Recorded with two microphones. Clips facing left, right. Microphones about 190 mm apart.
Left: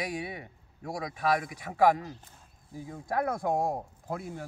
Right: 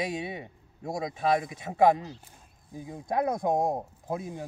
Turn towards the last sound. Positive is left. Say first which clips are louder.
# right 3 dB
turn(degrees=-20)  # may be behind; listen again after turning